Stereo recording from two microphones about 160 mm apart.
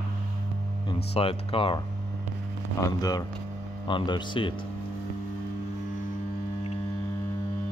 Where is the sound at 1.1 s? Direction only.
35° left (ahead or behind).